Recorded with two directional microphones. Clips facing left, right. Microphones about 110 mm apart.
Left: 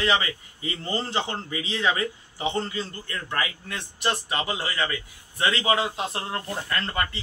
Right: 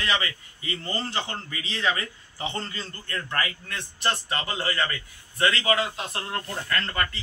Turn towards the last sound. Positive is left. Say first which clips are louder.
# even
turn(degrees=20)  # may be behind; listen again after turning